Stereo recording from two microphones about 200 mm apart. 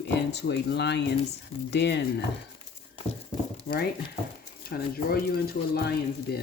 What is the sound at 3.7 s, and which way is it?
Speech, 30° left (ahead or behind).